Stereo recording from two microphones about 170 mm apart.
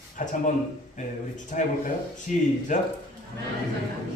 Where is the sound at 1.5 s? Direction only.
45° left (ahead or behind).